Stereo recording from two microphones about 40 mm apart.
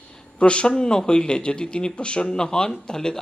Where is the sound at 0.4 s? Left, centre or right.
Left.